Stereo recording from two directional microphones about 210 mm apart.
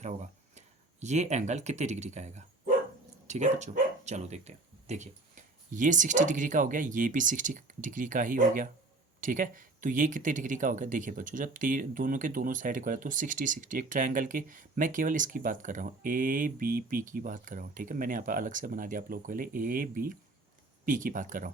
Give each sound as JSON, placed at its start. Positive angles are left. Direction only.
{"t": 0.0, "sound": "speech", "side_deg": -35}